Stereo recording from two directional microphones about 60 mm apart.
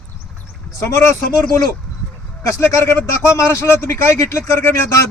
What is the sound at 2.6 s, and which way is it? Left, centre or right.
Speech, left.